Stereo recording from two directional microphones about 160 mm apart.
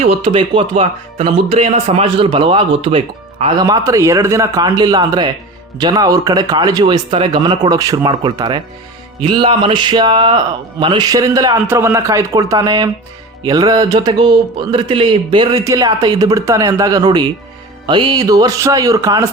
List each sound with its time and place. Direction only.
0.0 s speech: 40° right (ahead or behind)
3.6 s speech: 20° right (ahead or behind)